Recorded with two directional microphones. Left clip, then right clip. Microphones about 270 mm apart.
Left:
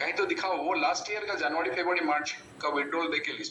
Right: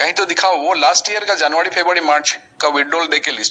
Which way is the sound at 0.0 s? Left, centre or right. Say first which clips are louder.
Right 15 dB; right.